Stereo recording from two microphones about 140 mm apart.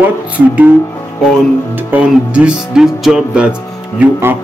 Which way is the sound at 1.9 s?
10° right (ahead or behind).